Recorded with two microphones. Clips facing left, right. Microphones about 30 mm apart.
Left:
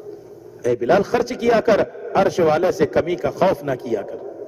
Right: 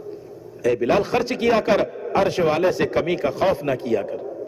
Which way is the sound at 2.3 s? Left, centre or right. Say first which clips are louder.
Left 3 dB; right.